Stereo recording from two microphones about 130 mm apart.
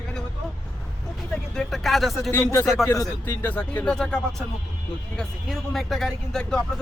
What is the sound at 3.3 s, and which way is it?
A man's voice, 15° left (ahead or behind).